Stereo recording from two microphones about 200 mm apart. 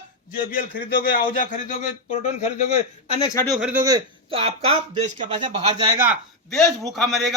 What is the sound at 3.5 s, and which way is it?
Speech, 5° right (ahead or behind).